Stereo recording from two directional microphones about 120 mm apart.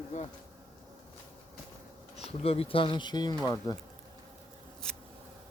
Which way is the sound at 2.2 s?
55° left (ahead or behind).